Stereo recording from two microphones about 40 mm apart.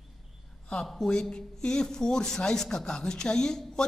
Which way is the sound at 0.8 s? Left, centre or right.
Centre.